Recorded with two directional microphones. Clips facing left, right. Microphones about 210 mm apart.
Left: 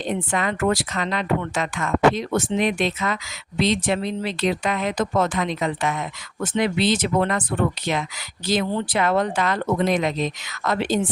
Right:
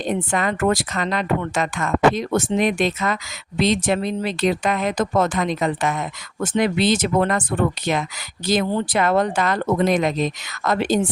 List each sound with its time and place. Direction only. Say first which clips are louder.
0.3 s speech: right 1 dB; 45° right (ahead or behind)
8.4 s speech: right 2 dB; 45° right (ahead or behind)